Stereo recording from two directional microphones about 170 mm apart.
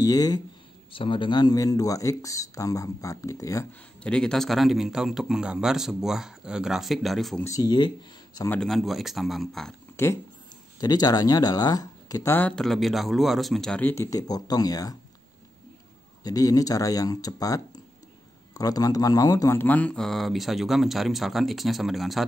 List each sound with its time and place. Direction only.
0.0 s speech: 20° left (ahead or behind)
4.0 s a man's voice: 5° left (ahead or behind)
7.4 s speech: 20° left (ahead or behind)
8.5 s a man's voice: centre (ahead or behind)
10.0 s speech: 15° left (ahead or behind)
16.3 s a man's voice: 20° left (ahead or behind); by 22.2 s centre (ahead or behind)